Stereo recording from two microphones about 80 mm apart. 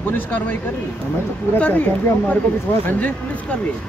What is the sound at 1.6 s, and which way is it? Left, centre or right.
Speech, centre.